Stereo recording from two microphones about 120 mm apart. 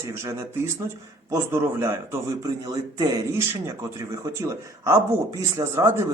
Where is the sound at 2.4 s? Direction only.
35° right (ahead or behind).